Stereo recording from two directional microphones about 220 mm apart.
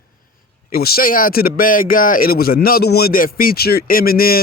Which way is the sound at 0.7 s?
45° left (ahead or behind).